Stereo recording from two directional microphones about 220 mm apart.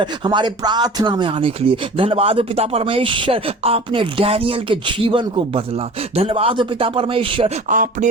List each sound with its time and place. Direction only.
0.0 s speech: 20° right (ahead or behind)
7.7 s chopping: 35° right (ahead or behind)